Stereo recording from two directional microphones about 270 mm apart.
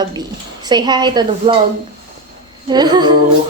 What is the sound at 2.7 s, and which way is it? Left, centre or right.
Speech, centre.